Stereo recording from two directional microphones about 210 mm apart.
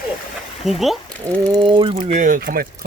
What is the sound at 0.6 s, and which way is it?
Speech, centre (ahead or behind).